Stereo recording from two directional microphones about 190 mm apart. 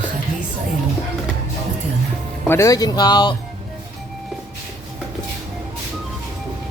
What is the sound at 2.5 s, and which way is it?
Speech, 15° left (ahead or behind).